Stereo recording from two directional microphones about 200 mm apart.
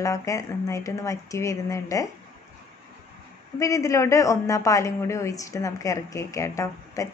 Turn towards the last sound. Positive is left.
turn(degrees=15)  # may be behind; listen again after turning